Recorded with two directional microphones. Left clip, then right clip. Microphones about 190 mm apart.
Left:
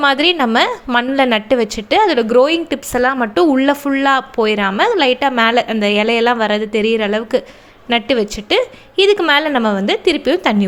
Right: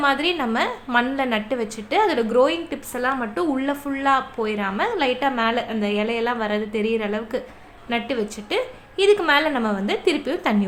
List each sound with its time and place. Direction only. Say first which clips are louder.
0.0 s a woman's voice: left 8 dB; 45° left (ahead or behind)